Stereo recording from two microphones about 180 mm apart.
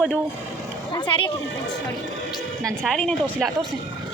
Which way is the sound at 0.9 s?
30° left (ahead or behind).